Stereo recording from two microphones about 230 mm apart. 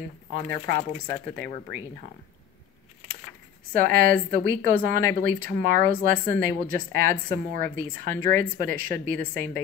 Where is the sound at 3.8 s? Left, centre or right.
Right.